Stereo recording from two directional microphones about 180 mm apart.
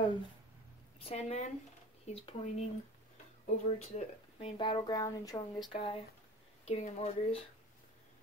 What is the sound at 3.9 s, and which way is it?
Speech, 30° left (ahead or behind).